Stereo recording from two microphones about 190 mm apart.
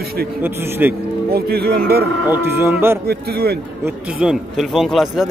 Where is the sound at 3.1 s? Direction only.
55° right (ahead or behind).